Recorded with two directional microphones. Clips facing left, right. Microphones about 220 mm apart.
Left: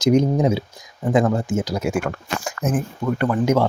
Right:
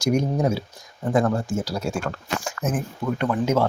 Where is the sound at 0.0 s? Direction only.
20° left (ahead or behind).